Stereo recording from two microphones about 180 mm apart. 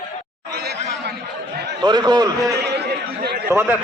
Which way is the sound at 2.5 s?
65° right (ahead or behind).